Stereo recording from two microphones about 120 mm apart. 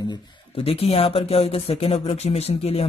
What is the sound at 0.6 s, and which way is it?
Speech, 55° left (ahead or behind).